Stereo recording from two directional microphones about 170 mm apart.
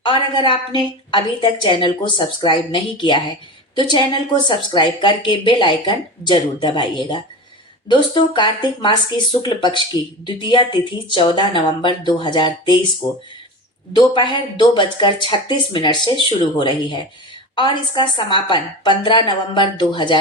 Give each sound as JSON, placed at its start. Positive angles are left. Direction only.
{"t": 0.0, "sound": "speech", "side_deg": 30}
{"t": 13.9, "sound": "speech", "side_deg": 25}